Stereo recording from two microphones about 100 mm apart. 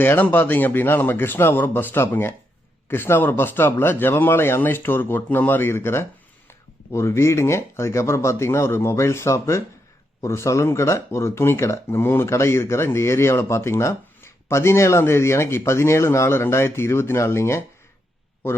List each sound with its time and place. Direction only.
0.0 s speech: 20° left (ahead or behind)